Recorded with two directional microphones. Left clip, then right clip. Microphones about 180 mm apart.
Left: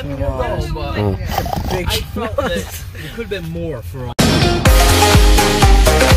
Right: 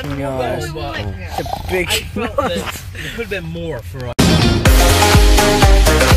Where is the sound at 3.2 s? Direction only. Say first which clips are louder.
Even; 30° left (ahead or behind).